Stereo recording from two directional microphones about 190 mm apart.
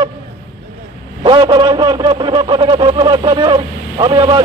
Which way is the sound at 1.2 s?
25° right (ahead or behind).